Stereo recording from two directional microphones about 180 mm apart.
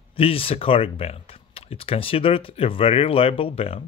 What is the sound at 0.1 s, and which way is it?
Speech, 30° left (ahead or behind).